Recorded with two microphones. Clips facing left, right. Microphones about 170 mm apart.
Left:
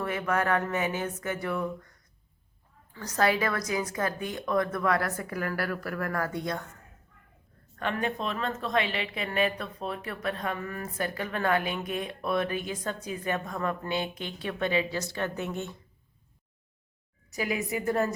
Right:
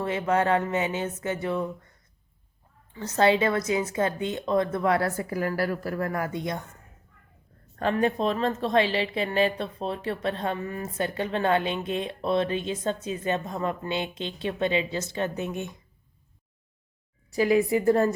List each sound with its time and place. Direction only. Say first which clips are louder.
0.0 s speech: right 4 dB; 25° right (ahead or behind)
7.8 s speech: right 6 dB; 35° right (ahead or behind); by 15.8 s 15° right (ahead or behind)
17.3 s a woman's voice: right 9 dB; 30° right (ahead or behind)